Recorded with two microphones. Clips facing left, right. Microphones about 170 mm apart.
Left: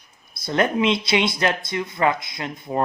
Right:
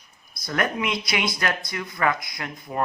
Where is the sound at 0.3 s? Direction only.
25° left (ahead or behind).